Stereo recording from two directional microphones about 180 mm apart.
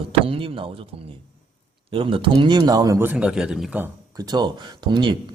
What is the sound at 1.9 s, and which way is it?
A man's voice, 30° right (ahead or behind).